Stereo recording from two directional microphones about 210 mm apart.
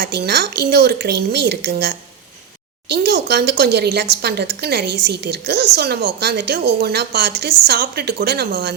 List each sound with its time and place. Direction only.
0.0 s speech: 50° right (ahead or behind)